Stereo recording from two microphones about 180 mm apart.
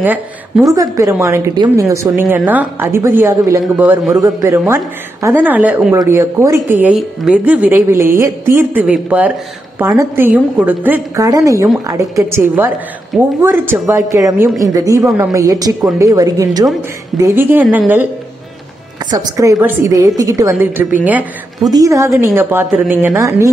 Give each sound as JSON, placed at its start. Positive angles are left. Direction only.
{"t": 0.0, "sound": "a woman's voice", "side_deg": -10}
{"t": 3.6, "sound": "a man's voice", "side_deg": -5}
{"t": 4.1, "sound": "a woman's voice", "side_deg": -20}
{"t": 19.0, "sound": "a woman's voice", "side_deg": -20}
{"t": 21.6, "sound": "a woman's voice", "side_deg": -20}